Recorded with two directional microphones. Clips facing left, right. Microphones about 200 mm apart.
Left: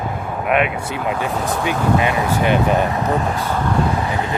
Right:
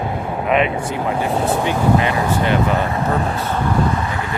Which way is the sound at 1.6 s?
15° left (ahead or behind).